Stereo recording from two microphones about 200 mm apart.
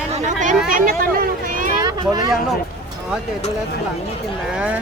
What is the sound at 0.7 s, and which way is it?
Vehicle, 45° right (ahead or behind).